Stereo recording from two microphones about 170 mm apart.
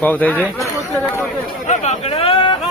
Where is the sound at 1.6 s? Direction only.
35° left (ahead or behind).